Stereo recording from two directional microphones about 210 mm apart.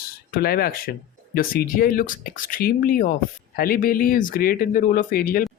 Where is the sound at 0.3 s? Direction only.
50° left (ahead or behind).